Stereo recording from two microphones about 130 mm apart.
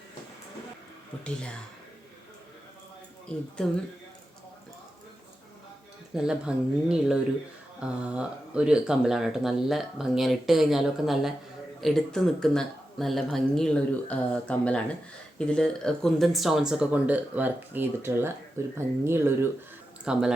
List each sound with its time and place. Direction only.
3.3 s speech: 10° left (ahead or behind)
6.1 s speech: 5° right (ahead or behind)
20.1 s speech: 5° right (ahead or behind)